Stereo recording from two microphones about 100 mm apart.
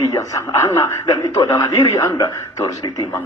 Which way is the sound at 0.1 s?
30° left (ahead or behind).